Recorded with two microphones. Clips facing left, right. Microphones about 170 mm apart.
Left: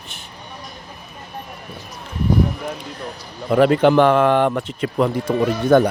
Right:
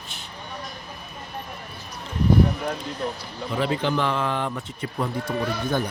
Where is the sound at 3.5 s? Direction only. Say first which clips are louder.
Left 11 dB; 60° left (ahead or behind); by 5.1 s 85° left.